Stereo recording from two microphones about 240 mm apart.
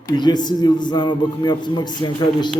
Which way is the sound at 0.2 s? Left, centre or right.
Centre.